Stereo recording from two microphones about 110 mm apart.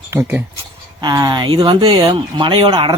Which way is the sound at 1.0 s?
40° right (ahead or behind).